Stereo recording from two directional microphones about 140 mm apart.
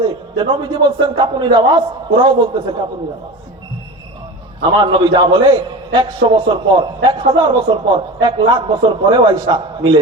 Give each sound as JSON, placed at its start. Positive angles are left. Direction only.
{"t": 0.0, "sound": "a man's voice", "side_deg": -35}
{"t": 4.8, "sound": "a man's voice", "side_deg": -35}